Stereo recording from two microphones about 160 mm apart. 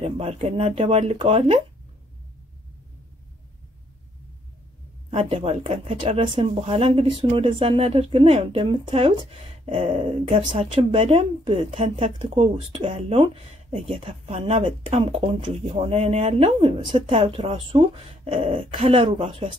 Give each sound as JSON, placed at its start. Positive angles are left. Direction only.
{"t": 0.0, "sound": "speech", "side_deg": -40}
{"t": 5.1, "sound": "speech", "side_deg": -40}